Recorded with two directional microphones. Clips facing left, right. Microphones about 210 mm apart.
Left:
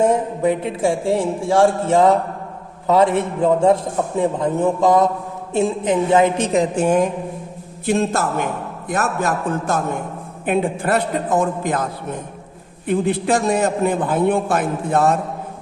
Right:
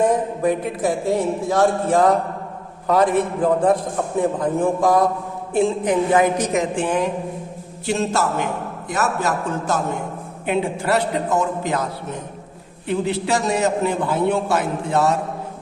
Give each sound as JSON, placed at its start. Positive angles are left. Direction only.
{"t": 0.0, "sound": "a man's voice", "side_deg": 25}